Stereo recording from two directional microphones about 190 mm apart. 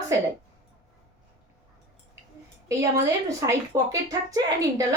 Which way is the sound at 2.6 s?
15° right (ahead or behind).